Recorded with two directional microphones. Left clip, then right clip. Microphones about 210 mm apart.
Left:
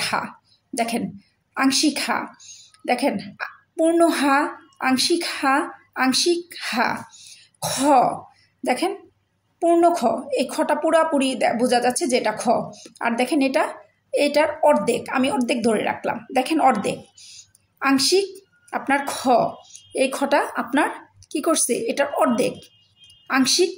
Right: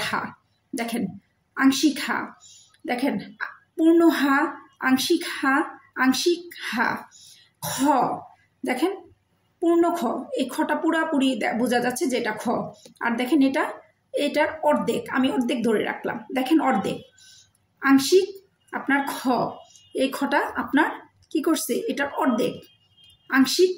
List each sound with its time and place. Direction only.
0.7 s a woman's voice: 45° left (ahead or behind)
9.6 s a woman's voice: 45° left (ahead or behind)